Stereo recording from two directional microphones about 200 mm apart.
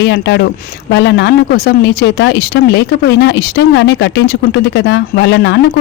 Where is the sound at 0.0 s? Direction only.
60° left (ahead or behind).